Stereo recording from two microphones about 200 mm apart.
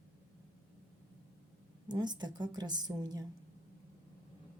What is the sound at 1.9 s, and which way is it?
A woman's voice, 20° right (ahead or behind).